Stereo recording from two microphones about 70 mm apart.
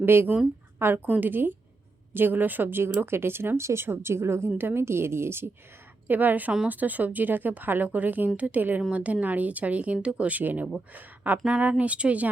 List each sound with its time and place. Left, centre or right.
0.0 s a woman's voice: right
6.1 s speech: right
11.4 s speech: centre